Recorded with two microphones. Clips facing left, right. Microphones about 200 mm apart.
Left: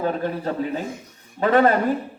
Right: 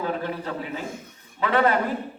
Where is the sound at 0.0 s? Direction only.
40° left (ahead or behind).